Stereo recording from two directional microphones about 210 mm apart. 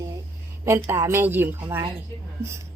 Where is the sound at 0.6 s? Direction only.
15° right (ahead or behind).